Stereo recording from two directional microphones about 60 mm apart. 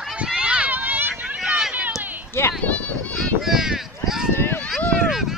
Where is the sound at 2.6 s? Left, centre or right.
Left.